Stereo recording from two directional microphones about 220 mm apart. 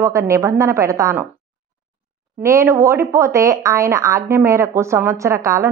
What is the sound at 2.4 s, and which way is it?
Speech, 10° right (ahead or behind).